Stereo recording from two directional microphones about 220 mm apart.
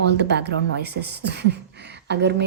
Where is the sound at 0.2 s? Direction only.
50° right (ahead or behind).